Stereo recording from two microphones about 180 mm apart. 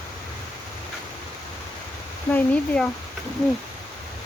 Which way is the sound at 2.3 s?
5° left (ahead or behind).